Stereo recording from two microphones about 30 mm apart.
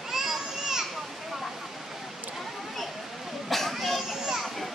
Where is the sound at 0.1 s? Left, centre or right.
Centre.